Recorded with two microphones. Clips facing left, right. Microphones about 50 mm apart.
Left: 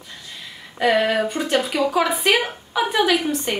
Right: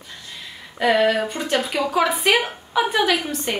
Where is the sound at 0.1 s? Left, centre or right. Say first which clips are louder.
Even; centre.